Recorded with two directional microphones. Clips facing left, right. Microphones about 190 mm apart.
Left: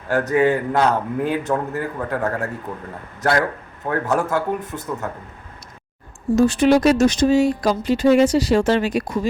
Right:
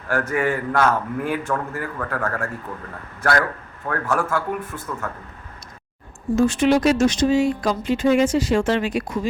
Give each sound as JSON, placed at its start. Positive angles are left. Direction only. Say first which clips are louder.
{"t": 0.1, "sound": "a man's voice", "louder": "left 5 dB", "side_deg": 20}
{"t": 3.8, "sound": "a man's voice", "louder": "left 3 dB", "side_deg": 20}
{"t": 6.3, "sound": "speech", "louder": "left 2 dB", "side_deg": 35}